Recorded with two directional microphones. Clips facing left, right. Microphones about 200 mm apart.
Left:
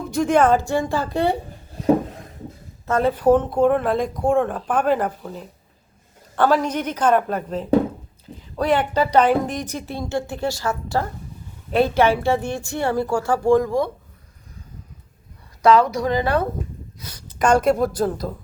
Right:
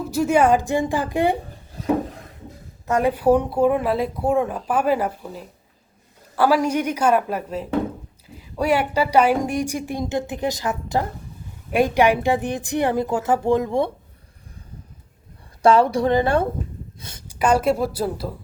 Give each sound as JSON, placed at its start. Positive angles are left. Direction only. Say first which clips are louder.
{"t": 0.0, "sound": "speech", "louder": "even", "side_deg": -5}
{"t": 2.8, "sound": "speech", "louder": "left 1 dB", "side_deg": -15}
{"t": 15.6, "sound": "a woman's voice", "louder": "even", "side_deg": -30}
{"t": 17.2, "sound": "speech", "louder": "left 1 dB", "side_deg": -5}